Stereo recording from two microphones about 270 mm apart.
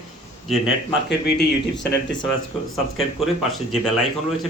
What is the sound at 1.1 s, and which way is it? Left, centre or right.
Speech, left.